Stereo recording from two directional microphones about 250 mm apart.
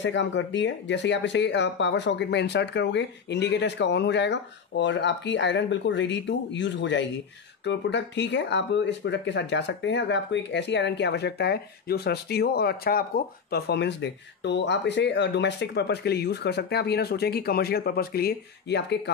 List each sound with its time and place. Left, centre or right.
0.0 s speech: left